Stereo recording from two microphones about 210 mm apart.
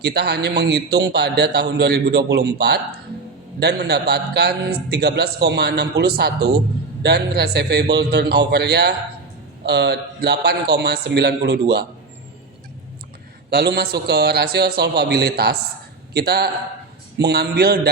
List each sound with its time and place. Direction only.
0.0 s a man's voice: 50° right (ahead or behind)
13.5 s a man's voice: 50° right (ahead or behind)